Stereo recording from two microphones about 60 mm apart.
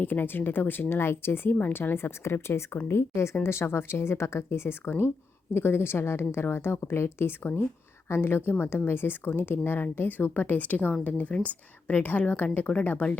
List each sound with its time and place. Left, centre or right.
0.0 s a woman's voice: left